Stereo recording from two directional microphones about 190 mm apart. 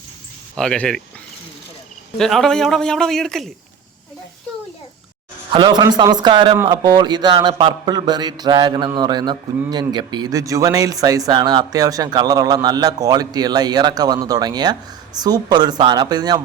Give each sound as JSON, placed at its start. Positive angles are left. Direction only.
{"t": 0.5, "sound": "a man's voice", "side_deg": 5}
{"t": 2.1, "sound": "a man's voice", "side_deg": 0}
{"t": 5.5, "sound": "a sound", "side_deg": -25}